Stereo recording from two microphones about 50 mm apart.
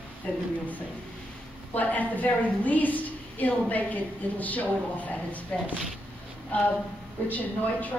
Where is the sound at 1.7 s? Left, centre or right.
Left.